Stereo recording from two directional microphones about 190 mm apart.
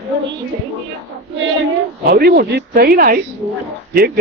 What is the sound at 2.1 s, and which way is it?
Speech, 55° right (ahead or behind).